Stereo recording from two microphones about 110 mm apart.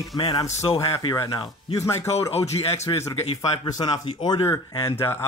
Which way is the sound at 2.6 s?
60° left (ahead or behind).